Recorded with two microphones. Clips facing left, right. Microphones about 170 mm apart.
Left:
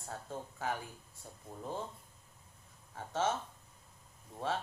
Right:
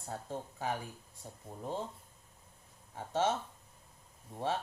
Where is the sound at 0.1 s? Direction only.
20° right (ahead or behind).